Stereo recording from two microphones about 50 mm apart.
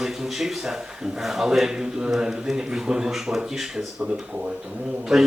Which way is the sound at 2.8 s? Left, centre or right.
Centre.